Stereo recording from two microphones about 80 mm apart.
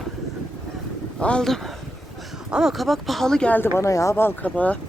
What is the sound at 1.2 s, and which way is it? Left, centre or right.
Speech, centre.